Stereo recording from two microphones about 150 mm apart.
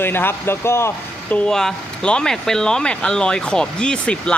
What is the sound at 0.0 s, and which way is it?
Speech, 15° left (ahead or behind).